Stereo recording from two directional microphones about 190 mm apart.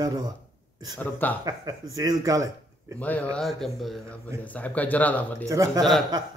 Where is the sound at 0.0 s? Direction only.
20° right (ahead or behind).